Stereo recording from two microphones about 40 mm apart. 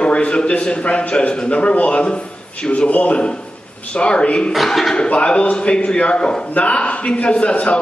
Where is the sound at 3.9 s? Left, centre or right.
Left.